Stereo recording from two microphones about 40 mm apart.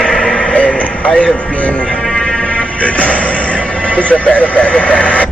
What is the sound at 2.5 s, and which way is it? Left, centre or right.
Music, left.